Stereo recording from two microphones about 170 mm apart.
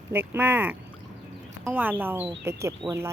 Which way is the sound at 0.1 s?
10° right (ahead or behind).